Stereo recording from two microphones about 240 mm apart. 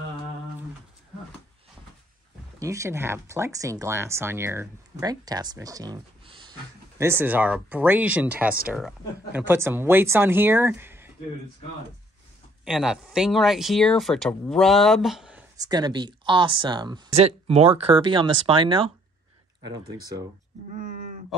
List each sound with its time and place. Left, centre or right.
2.6 s speech: centre
7.0 s speech: centre
12.6 s speech: centre
15.5 s speech: centre
19.9 s speech: centre
20.7 s a sound: right